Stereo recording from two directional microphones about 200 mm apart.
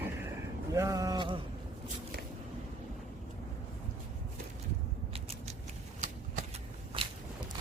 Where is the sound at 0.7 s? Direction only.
15° right (ahead or behind).